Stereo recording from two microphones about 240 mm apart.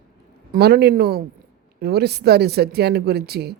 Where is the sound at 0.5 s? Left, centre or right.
Right.